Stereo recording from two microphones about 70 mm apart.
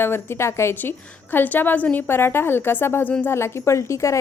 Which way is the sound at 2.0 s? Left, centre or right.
Left.